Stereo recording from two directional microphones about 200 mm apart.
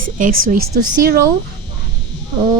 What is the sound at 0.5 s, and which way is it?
Speech, 50° right (ahead or behind).